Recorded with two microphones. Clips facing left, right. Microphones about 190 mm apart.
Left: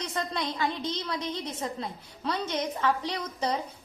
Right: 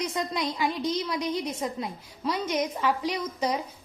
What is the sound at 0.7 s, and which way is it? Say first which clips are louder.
Speech: right 4 dB; 25° left (ahead or behind).